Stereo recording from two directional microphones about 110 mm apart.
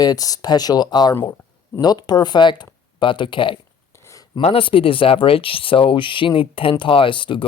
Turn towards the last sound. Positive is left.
turn(degrees=50)  # may be behind; listen again after turning